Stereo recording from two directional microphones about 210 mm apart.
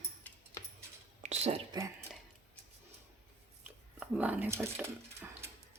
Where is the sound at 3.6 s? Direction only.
5° right (ahead or behind).